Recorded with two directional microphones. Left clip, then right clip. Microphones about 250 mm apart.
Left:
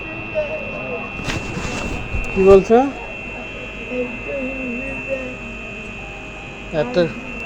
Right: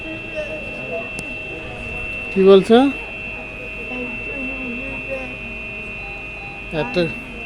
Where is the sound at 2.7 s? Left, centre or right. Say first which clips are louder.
Even; right.